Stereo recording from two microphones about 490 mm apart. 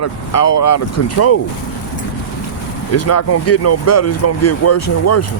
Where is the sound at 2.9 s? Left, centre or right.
Left.